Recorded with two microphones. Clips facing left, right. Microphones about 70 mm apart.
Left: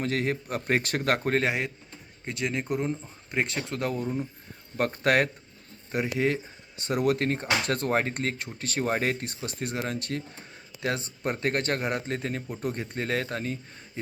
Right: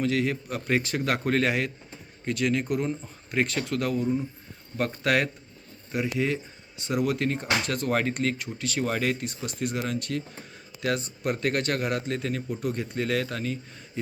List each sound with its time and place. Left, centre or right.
0.0 s a man's voice: left
1.3 s a man's voice: left